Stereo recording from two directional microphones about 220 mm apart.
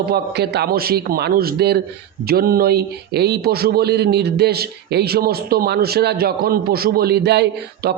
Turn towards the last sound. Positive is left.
turn(degrees=-50)  # may be behind; listen again after turning